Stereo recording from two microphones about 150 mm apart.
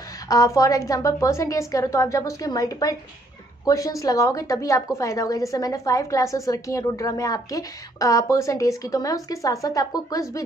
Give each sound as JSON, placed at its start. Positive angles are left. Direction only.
{"t": 0.3, "sound": "a woman's voice", "side_deg": 25}